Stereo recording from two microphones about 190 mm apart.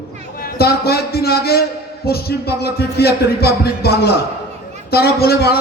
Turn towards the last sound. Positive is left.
turn(degrees=55)  # may be behind; listen again after turning